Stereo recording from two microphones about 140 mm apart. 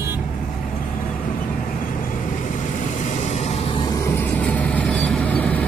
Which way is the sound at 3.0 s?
60° left (ahead or behind).